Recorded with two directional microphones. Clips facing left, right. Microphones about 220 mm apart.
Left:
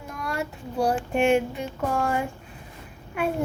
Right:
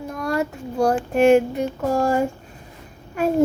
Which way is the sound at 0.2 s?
40° right (ahead or behind).